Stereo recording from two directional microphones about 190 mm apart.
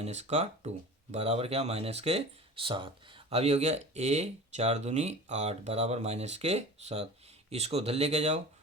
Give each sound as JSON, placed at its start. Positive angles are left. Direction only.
{"t": 0.0, "sound": "speech", "side_deg": -35}